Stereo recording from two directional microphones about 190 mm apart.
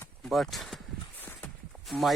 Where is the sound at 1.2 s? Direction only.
5° left (ahead or behind).